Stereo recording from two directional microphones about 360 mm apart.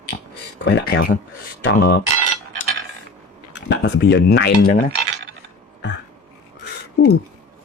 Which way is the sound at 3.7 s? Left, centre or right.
Left.